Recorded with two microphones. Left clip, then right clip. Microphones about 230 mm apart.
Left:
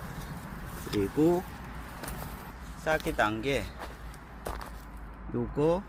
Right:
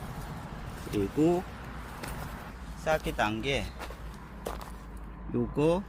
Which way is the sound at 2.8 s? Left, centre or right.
Centre.